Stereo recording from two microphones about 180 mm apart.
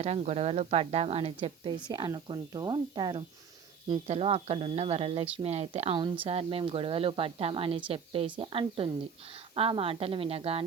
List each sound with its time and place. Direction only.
0.0 s a woman's voice: 35° right (ahead or behind)